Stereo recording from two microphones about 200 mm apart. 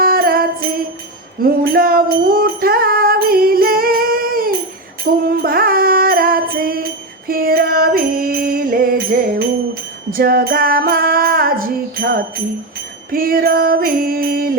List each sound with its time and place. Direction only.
0.0 s music: 50° right (ahead or behind)
10.1 s music: 45° right (ahead or behind)